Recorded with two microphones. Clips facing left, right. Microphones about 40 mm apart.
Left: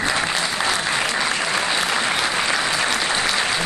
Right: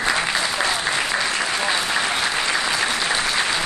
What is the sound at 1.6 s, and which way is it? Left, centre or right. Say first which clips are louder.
Applause: even; centre.